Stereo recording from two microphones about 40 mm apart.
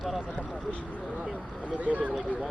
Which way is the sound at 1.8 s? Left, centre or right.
Right.